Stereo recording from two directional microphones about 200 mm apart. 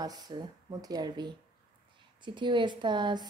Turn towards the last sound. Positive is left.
turn(degrees=-20)  # may be behind; listen again after turning